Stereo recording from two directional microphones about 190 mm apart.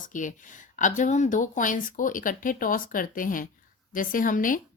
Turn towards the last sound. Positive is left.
turn(degrees=45)  # may be behind; listen again after turning